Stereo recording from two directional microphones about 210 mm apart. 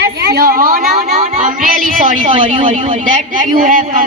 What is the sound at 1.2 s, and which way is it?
Child singing, 40° right (ahead or behind).